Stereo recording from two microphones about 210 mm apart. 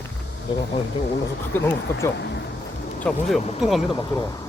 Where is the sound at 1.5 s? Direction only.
10° left (ahead or behind).